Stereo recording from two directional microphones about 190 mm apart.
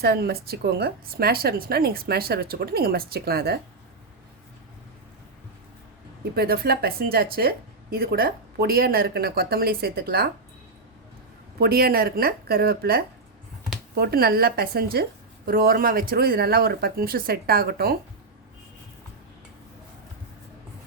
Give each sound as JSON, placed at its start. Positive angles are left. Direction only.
{"t": 0.0, "sound": "speech", "side_deg": -55}
{"t": 6.3, "sound": "speech", "side_deg": -55}
{"t": 11.6, "sound": "speech", "side_deg": -50}